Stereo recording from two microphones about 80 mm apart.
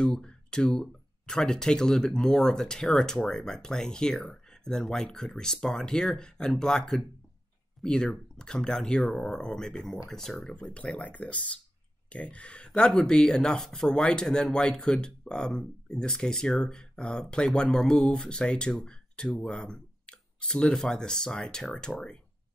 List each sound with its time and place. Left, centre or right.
0.0 s speech: centre